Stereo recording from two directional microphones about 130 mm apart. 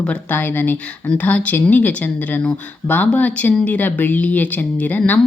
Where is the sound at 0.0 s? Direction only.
10° left (ahead or behind).